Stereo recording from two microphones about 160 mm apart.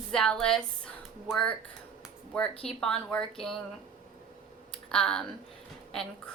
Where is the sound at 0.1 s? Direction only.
5° left (ahead or behind).